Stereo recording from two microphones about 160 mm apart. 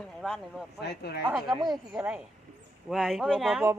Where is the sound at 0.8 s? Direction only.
90° left.